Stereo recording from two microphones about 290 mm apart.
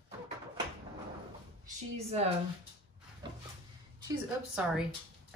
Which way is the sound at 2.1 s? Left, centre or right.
Right.